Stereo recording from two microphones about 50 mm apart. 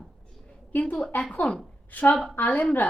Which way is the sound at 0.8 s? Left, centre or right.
Centre.